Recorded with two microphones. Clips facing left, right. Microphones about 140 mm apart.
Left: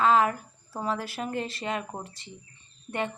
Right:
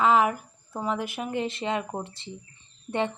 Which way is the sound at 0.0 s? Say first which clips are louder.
Right 1 dB; 20° right (ahead or behind).